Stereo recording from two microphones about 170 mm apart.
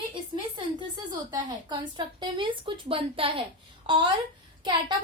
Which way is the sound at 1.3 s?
25° right (ahead or behind).